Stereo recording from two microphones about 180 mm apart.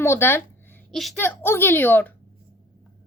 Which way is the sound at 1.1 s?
10° left (ahead or behind).